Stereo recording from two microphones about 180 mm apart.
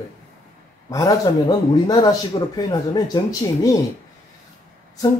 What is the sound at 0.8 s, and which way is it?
A man's voice, 20° left (ahead or behind).